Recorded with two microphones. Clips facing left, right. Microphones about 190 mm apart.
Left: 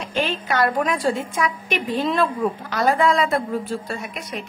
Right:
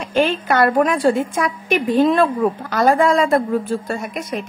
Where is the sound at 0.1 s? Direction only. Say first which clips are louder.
Right 7 dB; 50° right (ahead or behind).